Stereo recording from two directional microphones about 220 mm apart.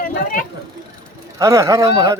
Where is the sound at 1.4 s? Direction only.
15° right (ahead or behind).